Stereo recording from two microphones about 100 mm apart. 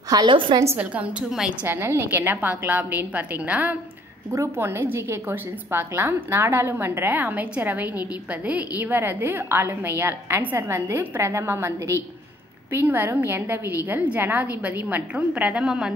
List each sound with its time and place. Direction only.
0.1 s a woman's voice: 50° right (ahead or behind)
0.7 s a woman's voice: 15° right (ahead or behind)
1.7 s a woman's voice: 20° right (ahead or behind)
4.3 s a woman's voice: 25° right (ahead or behind); by 15.9 s 5° right (ahead or behind)